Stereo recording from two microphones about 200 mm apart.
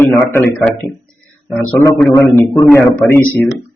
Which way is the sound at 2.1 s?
15° left (ahead or behind).